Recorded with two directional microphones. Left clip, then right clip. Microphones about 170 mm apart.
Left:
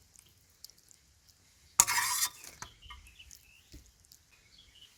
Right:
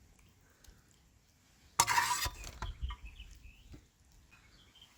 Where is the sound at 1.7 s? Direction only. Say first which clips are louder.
Even; 45° right (ahead or behind).